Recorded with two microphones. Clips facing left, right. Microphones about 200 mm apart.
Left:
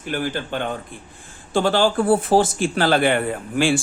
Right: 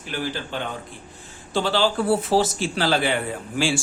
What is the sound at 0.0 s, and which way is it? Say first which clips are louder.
Speech: left 4 dB; 50° left (ahead or behind).